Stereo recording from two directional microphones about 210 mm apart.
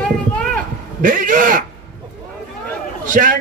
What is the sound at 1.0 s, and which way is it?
Speech, 40° right (ahead or behind).